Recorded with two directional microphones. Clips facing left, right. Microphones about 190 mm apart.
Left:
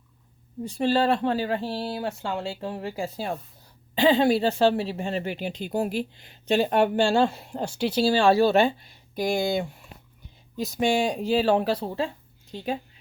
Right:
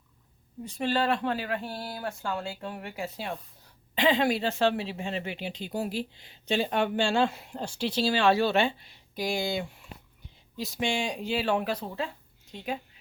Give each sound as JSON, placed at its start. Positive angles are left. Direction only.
{"t": 0.6, "sound": "speech", "side_deg": 30}
{"t": 7.5, "sound": "speech", "side_deg": 50}
{"t": 8.1, "sound": "speech", "side_deg": 35}